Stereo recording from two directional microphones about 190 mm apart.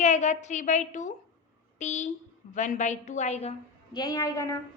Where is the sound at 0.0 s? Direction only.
35° left (ahead or behind).